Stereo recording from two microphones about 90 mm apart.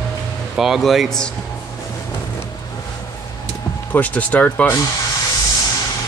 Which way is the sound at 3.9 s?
15° left (ahead or behind).